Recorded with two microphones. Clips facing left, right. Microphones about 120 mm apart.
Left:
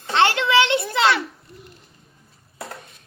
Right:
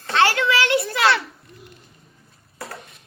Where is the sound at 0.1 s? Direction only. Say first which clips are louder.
Left 1 dB; 25° left (ahead or behind).